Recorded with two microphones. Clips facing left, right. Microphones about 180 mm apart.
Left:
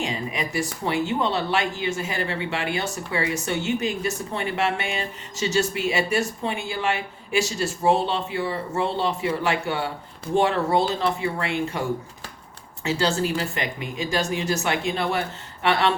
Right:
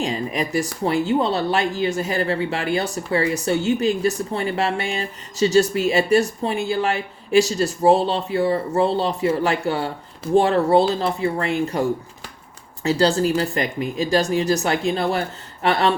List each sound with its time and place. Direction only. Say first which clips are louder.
0.0 s speech: right 4 dB; 40° right (ahead or behind)
12.8 s speech: right 5 dB; 35° right (ahead or behind)